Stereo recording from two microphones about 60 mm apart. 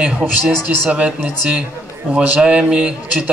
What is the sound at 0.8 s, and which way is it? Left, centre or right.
Speech, right.